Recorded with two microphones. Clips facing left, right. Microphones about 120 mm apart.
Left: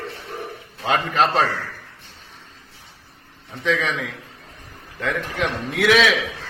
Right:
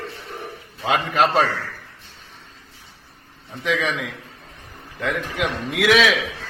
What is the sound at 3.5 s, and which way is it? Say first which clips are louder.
A man's voice: even; 5° right (ahead or behind).